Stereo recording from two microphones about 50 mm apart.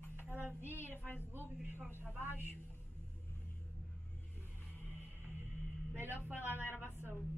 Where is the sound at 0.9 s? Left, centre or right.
Left.